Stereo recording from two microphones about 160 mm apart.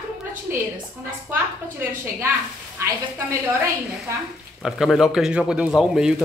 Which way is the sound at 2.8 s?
15° right (ahead or behind).